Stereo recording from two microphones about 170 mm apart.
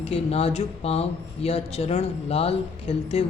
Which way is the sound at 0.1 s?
35° left (ahead or behind).